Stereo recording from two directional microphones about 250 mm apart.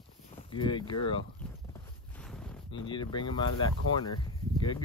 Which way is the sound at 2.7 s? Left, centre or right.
Centre.